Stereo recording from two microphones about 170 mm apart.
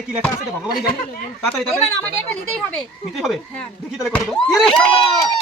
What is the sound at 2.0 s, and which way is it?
Speech, 10° left (ahead or behind).